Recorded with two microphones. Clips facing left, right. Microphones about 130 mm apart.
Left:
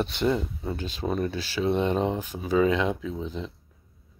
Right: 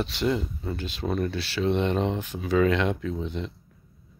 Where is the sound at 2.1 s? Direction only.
40° left (ahead or behind).